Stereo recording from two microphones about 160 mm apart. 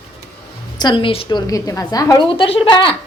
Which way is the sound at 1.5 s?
20° left (ahead or behind).